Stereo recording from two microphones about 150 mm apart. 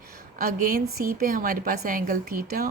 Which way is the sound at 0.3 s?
75° right (ahead or behind).